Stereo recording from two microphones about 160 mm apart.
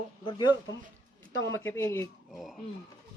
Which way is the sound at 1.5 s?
15° left (ahead or behind).